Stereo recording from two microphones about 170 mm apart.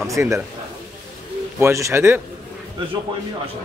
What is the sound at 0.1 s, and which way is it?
Speech, 20° right (ahead or behind).